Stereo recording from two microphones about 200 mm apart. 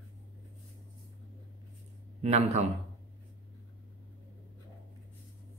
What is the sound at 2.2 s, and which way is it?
Speech, 30° right (ahead or behind).